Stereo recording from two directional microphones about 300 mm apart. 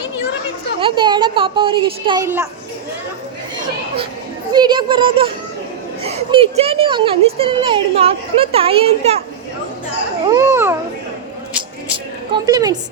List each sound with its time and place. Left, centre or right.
0.8 s speech: centre
4.5 s speech: centre
10.2 s a sound: centre
12.5 s a woman's voice: centre